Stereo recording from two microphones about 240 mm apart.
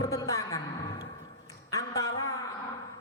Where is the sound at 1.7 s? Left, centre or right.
Centre.